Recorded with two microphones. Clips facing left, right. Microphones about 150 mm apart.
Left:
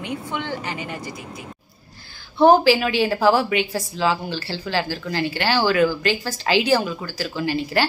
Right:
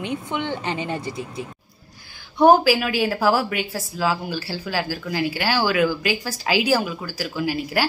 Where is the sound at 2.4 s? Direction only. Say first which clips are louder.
Left 1 dB; 10° right (ahead or behind).